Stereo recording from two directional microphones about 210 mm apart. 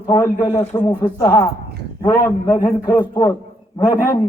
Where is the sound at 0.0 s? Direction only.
20° left (ahead or behind).